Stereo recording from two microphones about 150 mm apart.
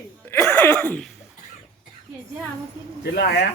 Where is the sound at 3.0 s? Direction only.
90° left.